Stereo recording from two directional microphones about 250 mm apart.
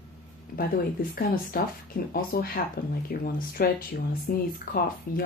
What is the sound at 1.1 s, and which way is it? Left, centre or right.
Speech, left.